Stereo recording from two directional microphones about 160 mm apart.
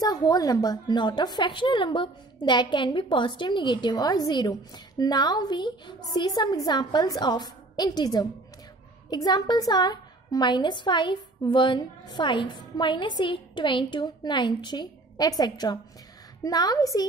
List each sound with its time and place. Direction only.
0.0 s a woman's voice: 25° left (ahead or behind)